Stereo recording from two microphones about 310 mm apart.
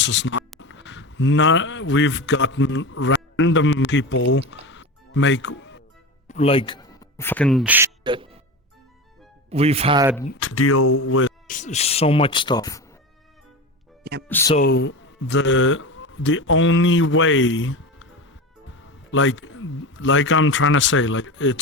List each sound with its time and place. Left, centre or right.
0.0 s speech: left
4.3 s music: left
6.2 s a man's voice: centre
9.5 s speech: centre
10.4 s speech: left
11.4 s speech: left
14.0 s speech: right
14.3 s speech: centre
14.5 s speech: left